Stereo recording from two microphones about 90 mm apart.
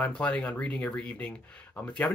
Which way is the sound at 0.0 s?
15° left (ahead or behind).